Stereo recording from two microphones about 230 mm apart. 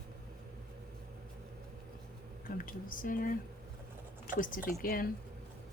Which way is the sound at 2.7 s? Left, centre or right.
Left.